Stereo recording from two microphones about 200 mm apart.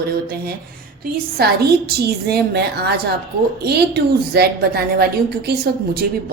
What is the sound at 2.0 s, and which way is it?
A woman's voice, 55° right (ahead or behind).